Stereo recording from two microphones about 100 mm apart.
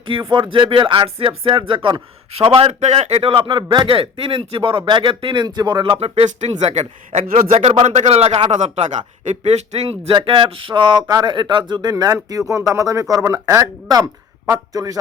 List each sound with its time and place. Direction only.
0.0 s speech: 60° right (ahead or behind); by 8.9 s 75° right (ahead or behind)
9.4 s speech: 90° right
10.1 s speech: 55° right (ahead or behind); by 14.9 s 35° right (ahead or behind)